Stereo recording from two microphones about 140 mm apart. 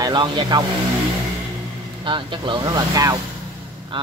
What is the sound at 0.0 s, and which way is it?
Speech, 30° right (ahead or behind).